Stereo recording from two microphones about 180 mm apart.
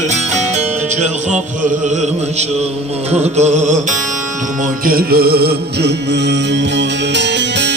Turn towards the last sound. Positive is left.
turn(degrees=-80)